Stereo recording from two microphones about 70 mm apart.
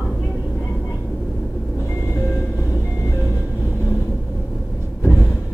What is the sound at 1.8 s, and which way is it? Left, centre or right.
Vehicle, left.